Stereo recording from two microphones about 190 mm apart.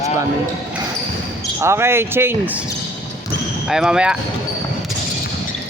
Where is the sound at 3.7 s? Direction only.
5° right (ahead or behind).